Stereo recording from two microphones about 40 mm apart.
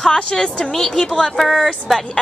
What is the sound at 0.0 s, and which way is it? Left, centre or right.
A woman's voice, centre.